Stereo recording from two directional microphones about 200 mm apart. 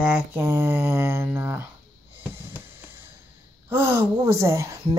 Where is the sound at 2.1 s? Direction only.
10° right (ahead or behind).